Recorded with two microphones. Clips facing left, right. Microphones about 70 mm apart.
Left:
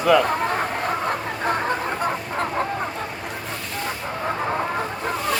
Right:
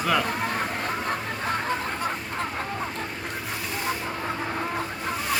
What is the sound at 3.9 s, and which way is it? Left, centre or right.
Vehicle, centre.